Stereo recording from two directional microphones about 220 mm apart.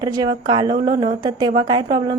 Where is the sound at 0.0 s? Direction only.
20° right (ahead or behind).